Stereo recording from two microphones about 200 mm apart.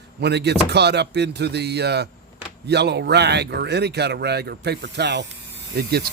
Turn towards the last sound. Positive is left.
turn(degrees=-55)  # may be behind; listen again after turning